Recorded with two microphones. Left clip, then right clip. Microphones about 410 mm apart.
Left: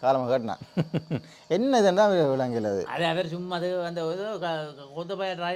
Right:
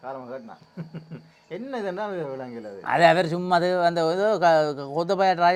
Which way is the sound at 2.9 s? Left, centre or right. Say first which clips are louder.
Right 9 dB; right.